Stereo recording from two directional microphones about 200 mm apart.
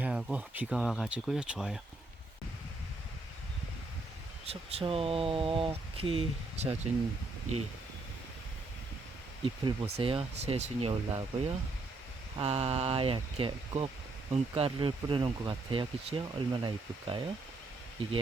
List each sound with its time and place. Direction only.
0.0 s speech: 5° right (ahead or behind)
4.4 s speech: 30° right (ahead or behind)
9.4 s speech: 25° right (ahead or behind)